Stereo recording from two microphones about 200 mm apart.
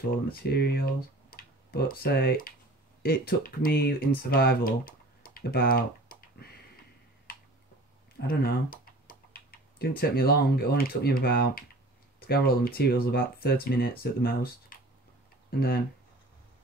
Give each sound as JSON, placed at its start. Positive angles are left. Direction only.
{"t": 0.1, "sound": "speech", "side_deg": 50}
{"t": 8.2, "sound": "speech", "side_deg": 50}